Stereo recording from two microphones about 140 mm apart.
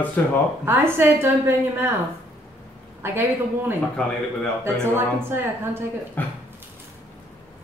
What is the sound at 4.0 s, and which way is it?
Speech, 10° left (ahead or behind).